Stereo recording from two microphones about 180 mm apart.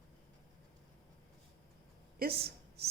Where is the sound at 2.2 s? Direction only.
55° right (ahead or behind).